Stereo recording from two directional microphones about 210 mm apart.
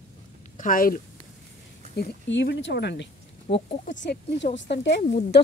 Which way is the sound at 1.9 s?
55° left (ahead or behind).